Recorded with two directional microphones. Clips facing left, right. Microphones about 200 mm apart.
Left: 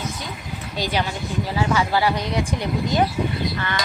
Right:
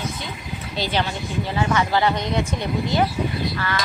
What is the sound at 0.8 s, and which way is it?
Speech, 10° left (ahead or behind).